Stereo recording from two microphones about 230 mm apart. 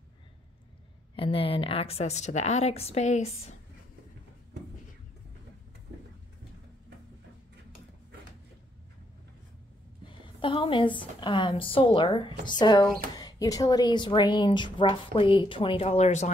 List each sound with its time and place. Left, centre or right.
1.1 s a woman's voice: left
10.0 s a woman's voice: left